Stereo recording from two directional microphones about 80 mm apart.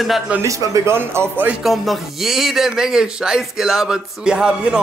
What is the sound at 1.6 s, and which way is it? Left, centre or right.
A man's voice, centre.